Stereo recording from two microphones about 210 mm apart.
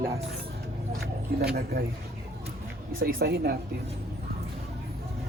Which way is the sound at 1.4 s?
45° right (ahead or behind).